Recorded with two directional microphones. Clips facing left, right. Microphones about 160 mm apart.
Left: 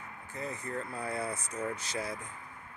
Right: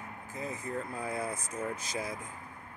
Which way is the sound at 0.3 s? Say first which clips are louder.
Even; 90° right.